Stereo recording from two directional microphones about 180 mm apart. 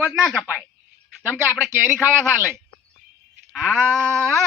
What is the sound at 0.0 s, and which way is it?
Speech, 10° right (ahead or behind).